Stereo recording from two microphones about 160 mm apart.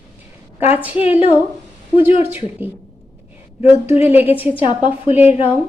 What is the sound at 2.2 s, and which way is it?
Speech, 15° right (ahead or behind).